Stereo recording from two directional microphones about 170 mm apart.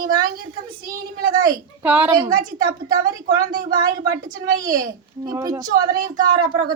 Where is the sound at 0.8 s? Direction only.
60° right (ahead or behind).